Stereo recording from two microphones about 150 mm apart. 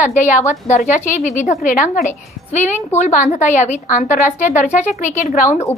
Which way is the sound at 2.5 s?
50° left (ahead or behind).